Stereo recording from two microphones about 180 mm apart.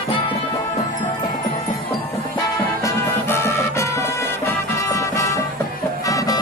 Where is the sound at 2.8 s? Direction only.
15° left (ahead or behind).